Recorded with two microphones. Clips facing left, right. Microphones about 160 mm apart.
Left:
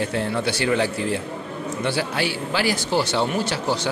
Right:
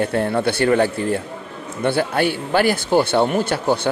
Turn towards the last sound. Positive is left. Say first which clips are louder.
# right 5 dB
turn(degrees=-55)  # may be behind; listen again after turning